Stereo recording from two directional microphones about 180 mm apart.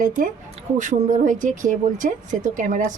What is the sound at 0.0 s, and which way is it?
Speech, 45° right (ahead or behind).